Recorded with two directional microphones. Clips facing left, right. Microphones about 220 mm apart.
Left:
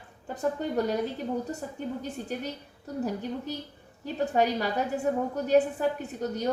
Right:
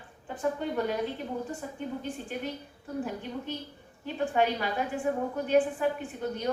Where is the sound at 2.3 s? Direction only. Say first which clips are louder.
Left 3 dB; 40° left (ahead or behind).